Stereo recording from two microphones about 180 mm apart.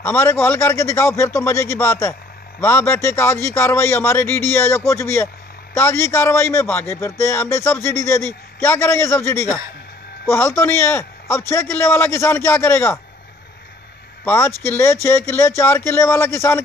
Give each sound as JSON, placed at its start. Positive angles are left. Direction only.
{"t": 0.0, "sound": "a man's voice", "side_deg": 15}
{"t": 14.2, "sound": "a man's voice", "side_deg": 15}